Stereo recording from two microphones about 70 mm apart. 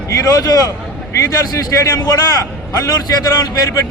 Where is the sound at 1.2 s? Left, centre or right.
Left.